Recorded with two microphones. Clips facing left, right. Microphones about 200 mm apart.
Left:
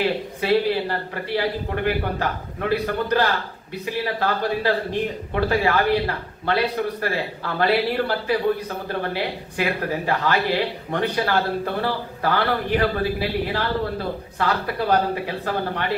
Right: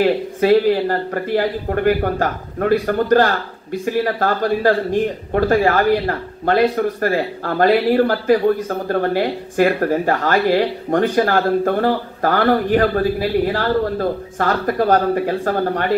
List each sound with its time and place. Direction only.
0.0 s a man's voice: 45° right (ahead or behind)